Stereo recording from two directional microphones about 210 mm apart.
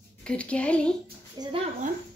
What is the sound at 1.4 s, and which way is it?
Speech, 25° right (ahead or behind).